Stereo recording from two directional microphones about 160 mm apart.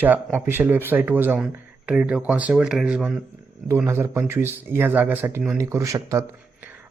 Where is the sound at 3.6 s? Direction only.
15° right (ahead or behind).